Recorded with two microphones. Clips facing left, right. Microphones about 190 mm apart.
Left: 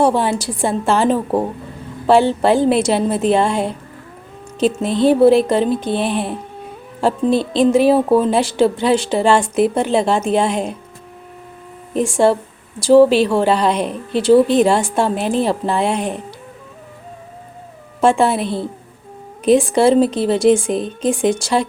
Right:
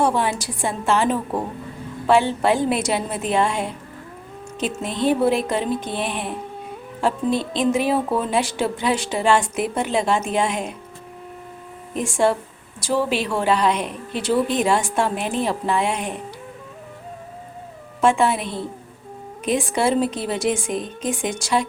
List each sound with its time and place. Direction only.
0.0 s speech: 30° left (ahead or behind)
11.9 s speech: 30° left (ahead or behind)
18.0 s speech: 30° left (ahead or behind)